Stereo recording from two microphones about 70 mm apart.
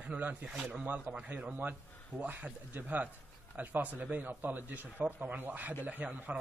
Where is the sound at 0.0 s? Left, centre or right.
Centre.